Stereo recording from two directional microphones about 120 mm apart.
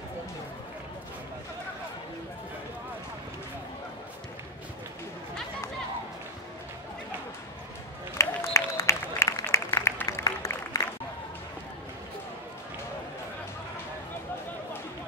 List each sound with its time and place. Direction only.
8.2 s applause: 25° left (ahead or behind)